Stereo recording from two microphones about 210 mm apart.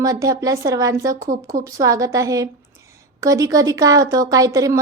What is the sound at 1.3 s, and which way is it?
Speech, 40° right (ahead or behind).